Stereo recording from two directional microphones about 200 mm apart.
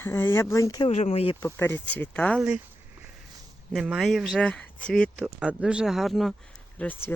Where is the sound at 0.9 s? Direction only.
30° left (ahead or behind).